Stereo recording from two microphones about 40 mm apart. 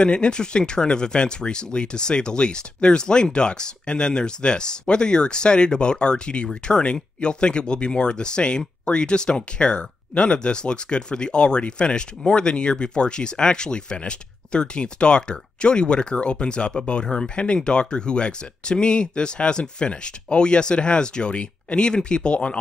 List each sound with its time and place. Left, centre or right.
0.0 s speech: left
17.0 s speech: centre